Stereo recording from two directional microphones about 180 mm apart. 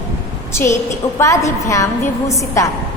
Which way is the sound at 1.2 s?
15° left (ahead or behind).